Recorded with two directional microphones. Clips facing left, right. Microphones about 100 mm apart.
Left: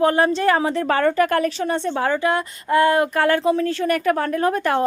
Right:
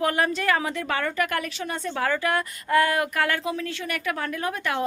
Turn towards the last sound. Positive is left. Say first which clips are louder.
# left 8 dB
turn(degrees=40)  # may be behind; listen again after turning